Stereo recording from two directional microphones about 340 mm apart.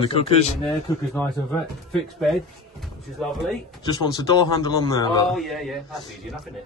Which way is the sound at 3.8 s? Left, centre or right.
Centre.